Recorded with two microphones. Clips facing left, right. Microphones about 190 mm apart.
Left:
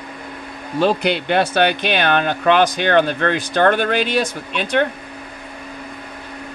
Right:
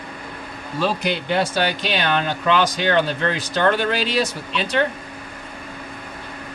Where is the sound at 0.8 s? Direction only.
60° left (ahead or behind).